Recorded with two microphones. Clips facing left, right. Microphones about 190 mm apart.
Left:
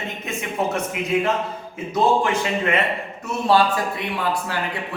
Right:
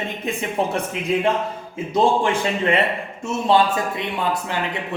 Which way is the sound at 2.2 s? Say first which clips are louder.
Right 1 dB; 30° right (ahead or behind).